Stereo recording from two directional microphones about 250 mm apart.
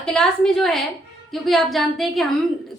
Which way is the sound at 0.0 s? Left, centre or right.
Centre.